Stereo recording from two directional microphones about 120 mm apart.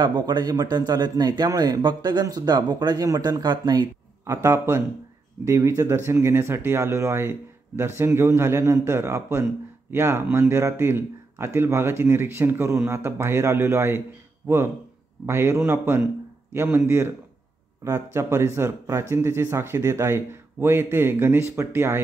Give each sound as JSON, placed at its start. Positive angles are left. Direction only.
{"t": 0.0, "sound": "speech", "side_deg": -40}
{"t": 4.3, "sound": "speech", "side_deg": -25}
{"t": 15.2, "sound": "speech", "side_deg": -20}